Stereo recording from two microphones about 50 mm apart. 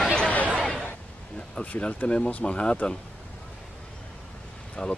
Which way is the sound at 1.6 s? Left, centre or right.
Left.